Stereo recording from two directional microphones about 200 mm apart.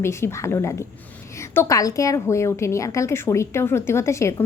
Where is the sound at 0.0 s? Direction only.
15° left (ahead or behind).